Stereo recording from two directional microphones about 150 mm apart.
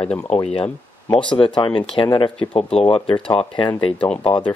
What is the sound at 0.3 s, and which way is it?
Speech, 40° left (ahead or behind).